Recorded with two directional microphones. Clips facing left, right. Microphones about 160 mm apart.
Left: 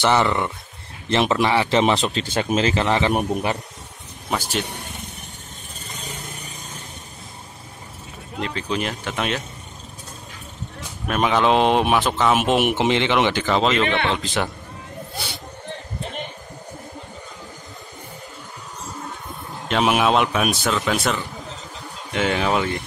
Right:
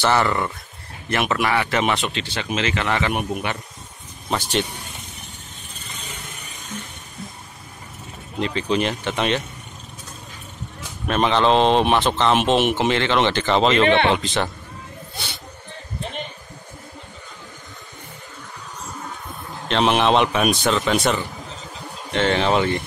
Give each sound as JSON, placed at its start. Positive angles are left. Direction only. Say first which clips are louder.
{"t": 0.0, "sound": "speech", "louder": "left 1 dB", "side_deg": 20}
{"t": 4.3, "sound": "speech", "louder": "right 2 dB", "side_deg": 5}
{"t": 8.4, "sound": "a man's voice", "louder": "right 4 dB", "side_deg": 0}
{"t": 11.1, "sound": "speech", "louder": "right 1 dB", "side_deg": 5}
{"t": 13.8, "sound": "speech", "louder": "right 5 dB", "side_deg": -30}
{"t": 14.2, "sound": "speech", "louder": "right 1 dB", "side_deg": 5}
{"t": 19.7, "sound": "a man's voice", "louder": "right 1 dB", "side_deg": 5}